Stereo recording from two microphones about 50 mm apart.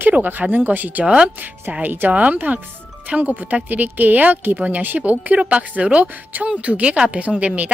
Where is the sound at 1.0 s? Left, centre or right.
Centre.